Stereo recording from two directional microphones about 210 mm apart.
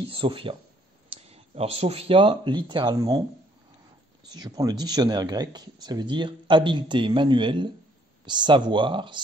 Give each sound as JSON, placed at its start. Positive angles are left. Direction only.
{"t": 0.0, "sound": "speech", "side_deg": -25}
{"t": 4.3, "sound": "speech", "side_deg": -20}